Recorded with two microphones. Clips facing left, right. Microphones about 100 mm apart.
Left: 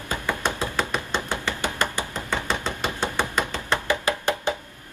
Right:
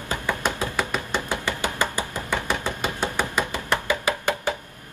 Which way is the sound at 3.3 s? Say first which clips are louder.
Even; 15° right (ahead or behind).